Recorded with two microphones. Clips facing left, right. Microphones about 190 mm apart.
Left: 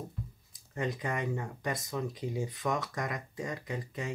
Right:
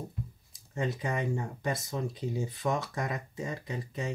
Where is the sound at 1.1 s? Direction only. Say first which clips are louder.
Right 2 dB; 25° right (ahead or behind).